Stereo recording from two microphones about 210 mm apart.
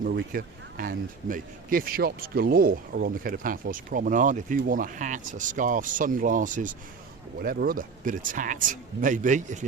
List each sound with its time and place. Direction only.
0.0 s speech: 45° right (ahead or behind)